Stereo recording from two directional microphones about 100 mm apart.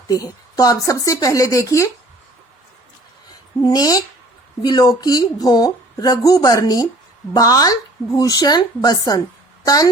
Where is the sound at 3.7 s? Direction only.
40° left (ahead or behind).